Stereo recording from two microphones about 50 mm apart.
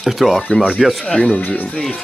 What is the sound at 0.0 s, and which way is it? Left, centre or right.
Speech, centre.